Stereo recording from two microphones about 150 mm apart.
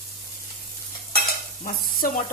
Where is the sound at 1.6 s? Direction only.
70° left (ahead or behind).